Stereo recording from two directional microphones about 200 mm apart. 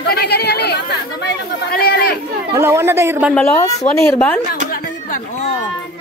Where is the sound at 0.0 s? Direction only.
50° left (ahead or behind).